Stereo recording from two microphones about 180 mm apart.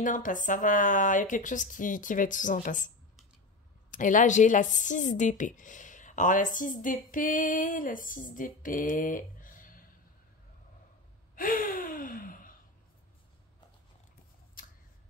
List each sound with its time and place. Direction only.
0.0 s speech: 45° left (ahead or behind)
3.9 s speech: 45° left (ahead or behind)
11.3 s gasp: 50° left (ahead or behind)
14.6 s a sound: 50° left (ahead or behind)